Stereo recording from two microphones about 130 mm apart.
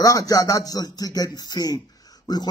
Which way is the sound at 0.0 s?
25° left (ahead or behind).